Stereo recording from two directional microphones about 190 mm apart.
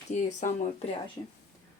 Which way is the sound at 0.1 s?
40° left (ahead or behind).